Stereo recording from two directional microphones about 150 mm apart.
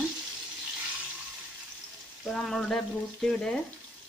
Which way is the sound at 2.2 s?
Centre (ahead or behind).